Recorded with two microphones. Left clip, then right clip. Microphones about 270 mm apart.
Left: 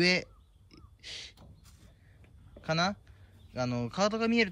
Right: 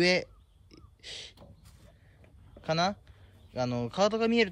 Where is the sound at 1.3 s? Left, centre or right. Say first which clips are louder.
Right 3 dB; right.